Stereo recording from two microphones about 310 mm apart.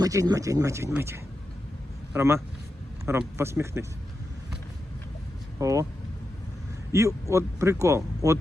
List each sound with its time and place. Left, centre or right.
0.0 s speech: centre
5.5 s speech: centre
6.9 s speech: centre